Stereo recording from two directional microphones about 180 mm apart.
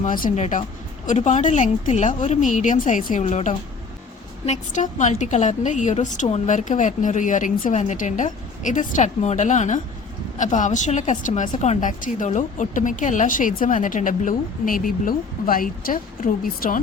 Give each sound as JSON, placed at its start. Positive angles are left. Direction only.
{"t": 0.0, "sound": "a woman's voice", "side_deg": 45}